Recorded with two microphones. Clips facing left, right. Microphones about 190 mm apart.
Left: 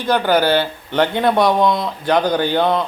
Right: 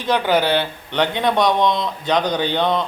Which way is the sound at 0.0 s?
Centre (ahead or behind).